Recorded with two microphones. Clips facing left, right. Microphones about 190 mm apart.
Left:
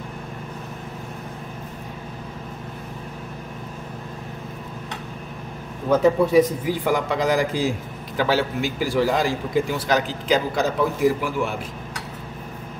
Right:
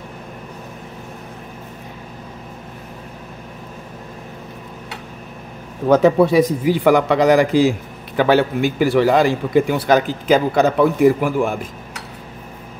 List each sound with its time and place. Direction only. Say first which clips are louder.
5.9 s a man's voice: right 5 dB; 75° right (ahead or behind)
8.2 s a man's voice: right 7 dB; 55° right (ahead or behind)